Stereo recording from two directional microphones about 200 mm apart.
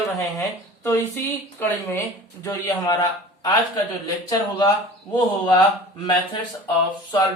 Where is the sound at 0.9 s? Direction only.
10° left (ahead or behind).